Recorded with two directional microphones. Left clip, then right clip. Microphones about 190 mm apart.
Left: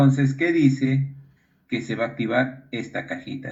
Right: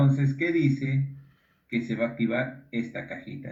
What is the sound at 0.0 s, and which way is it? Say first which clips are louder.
Speech: left 6 dB; 45° left (ahead or behind).